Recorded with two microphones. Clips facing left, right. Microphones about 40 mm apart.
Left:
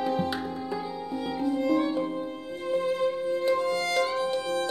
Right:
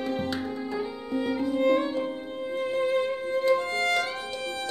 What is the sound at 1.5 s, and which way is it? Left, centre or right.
Music, right.